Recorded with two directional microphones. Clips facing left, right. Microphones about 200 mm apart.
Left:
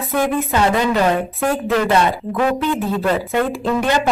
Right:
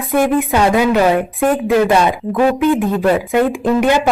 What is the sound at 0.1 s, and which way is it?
Speech, 15° right (ahead or behind).